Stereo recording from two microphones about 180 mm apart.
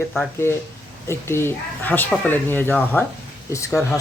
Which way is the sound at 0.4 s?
15° left (ahead or behind).